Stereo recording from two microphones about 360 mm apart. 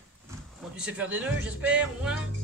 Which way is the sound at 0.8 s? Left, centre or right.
Centre.